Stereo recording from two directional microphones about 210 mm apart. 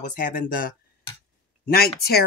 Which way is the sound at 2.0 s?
50° left (ahead or behind).